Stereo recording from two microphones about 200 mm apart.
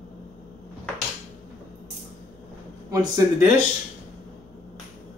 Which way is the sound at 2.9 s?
15° right (ahead or behind).